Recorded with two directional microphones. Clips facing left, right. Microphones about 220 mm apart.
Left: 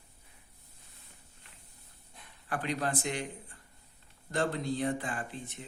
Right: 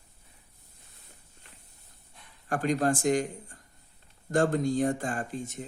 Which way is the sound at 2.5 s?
45° right (ahead or behind).